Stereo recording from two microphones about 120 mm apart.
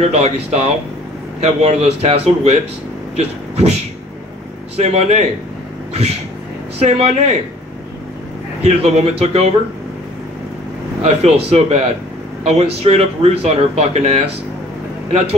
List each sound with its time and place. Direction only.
0.1 s speech: 60° right (ahead or behind)
6.8 s speech: 60° right (ahead or behind)
8.6 s speech: 60° right (ahead or behind)
11.1 s speech: 55° right (ahead or behind)